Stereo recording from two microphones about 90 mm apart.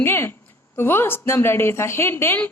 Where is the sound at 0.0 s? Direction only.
25° left (ahead or behind).